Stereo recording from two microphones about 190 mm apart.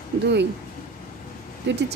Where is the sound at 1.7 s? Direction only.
70° right (ahead or behind).